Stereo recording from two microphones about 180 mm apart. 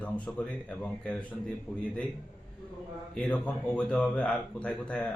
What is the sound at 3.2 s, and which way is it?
Speech, 5° left (ahead or behind).